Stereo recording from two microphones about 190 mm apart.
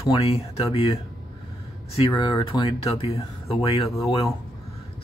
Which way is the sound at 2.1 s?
20° left (ahead or behind).